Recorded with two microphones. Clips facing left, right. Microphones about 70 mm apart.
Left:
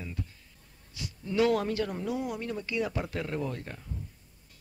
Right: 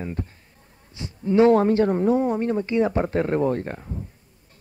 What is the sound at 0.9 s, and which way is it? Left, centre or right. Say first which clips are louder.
Speech: right 10 dB; right.